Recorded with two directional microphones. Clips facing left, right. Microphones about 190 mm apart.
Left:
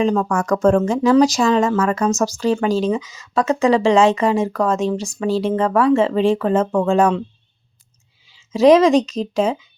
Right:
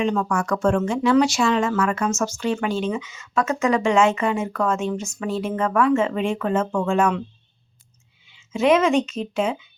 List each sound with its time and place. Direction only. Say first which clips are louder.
0.0 s speech: left 4 dB; 35° left (ahead or behind)
8.3 s speech: left 7 dB; 35° left (ahead or behind)